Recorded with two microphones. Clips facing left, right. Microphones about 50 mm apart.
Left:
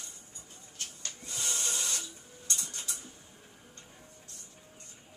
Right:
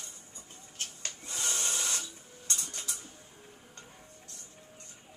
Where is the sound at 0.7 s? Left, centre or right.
Right.